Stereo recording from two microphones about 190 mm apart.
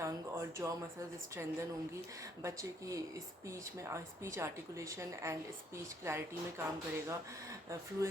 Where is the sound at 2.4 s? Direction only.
15° right (ahead or behind).